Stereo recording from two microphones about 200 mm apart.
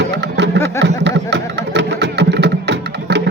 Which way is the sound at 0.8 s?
60° right (ahead or behind).